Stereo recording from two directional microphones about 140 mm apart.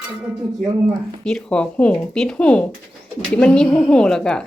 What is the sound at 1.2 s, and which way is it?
A woman's voice, 5° left (ahead or behind).